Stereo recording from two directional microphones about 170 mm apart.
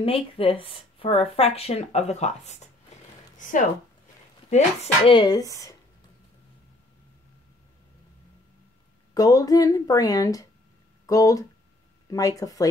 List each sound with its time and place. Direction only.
0.0 s speech: 35° left (ahead or behind)
5.1 s speech: 25° left (ahead or behind)
9.1 s speech: 20° left (ahead or behind)